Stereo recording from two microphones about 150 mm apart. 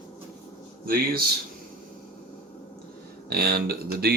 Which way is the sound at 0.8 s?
85° right.